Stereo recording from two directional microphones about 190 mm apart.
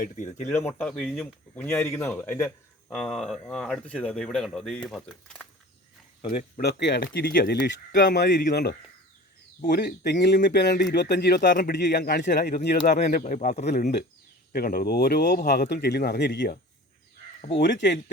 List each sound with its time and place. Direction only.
0.0 s speech: 40° left (ahead or behind)
0.5 s speech: 10° left (ahead or behind)
6.3 s speech: 55° left (ahead or behind)
11.9 s speech: 60° left (ahead or behind)
13.0 s speech: 50° left (ahead or behind)
14.5 s speech: 50° left (ahead or behind)